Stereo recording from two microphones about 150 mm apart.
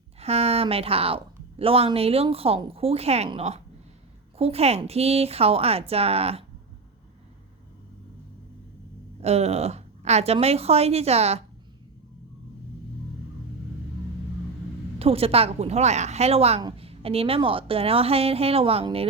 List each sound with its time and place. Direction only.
0.2 s a woman's voice: 45° right (ahead or behind)
9.2 s a woman's voice: 45° right (ahead or behind)
14.9 s a woman's voice: 40° right (ahead or behind)